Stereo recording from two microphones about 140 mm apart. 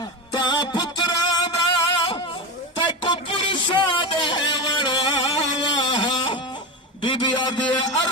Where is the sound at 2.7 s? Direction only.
35° left (ahead or behind).